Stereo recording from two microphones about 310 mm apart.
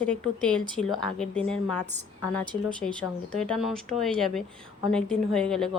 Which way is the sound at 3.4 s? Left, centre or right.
Centre.